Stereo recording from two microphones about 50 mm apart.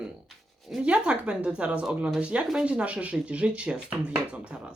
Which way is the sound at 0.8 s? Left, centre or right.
Right.